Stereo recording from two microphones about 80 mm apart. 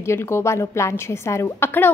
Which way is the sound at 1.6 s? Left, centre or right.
Left.